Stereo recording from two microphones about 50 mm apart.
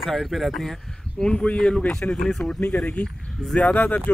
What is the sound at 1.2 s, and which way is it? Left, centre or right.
Speech, centre.